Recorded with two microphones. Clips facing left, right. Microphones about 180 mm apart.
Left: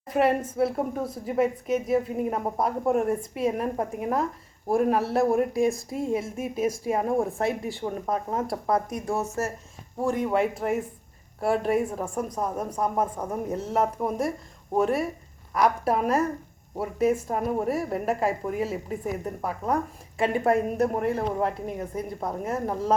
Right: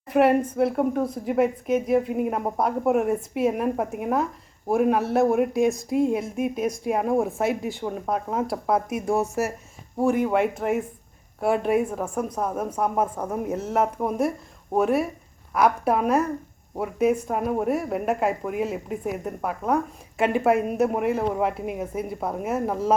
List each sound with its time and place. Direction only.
0.2 s a woman's voice: centre (ahead or behind)